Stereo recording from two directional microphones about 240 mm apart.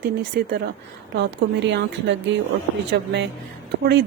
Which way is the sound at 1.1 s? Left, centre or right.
Right.